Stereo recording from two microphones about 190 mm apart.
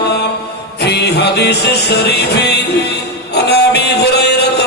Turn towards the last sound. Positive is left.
turn(degrees=60)  # may be behind; listen again after turning